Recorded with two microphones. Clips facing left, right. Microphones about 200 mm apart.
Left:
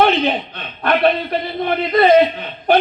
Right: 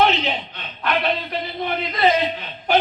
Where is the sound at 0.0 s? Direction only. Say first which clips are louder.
Left 5 dB; 55° left (ahead or behind).